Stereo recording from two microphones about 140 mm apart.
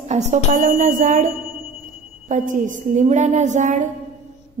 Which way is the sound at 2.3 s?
70° right (ahead or behind).